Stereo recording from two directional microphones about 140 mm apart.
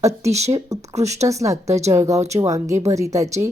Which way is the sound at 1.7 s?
55° right (ahead or behind).